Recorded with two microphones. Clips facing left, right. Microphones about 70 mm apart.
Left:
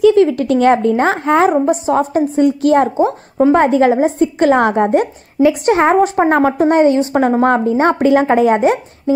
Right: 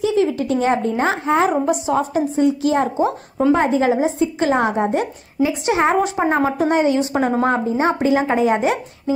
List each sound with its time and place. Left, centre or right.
0.0 s a woman's voice: left
3.0 s a woman's voice: left
3.5 s a woman's voice: left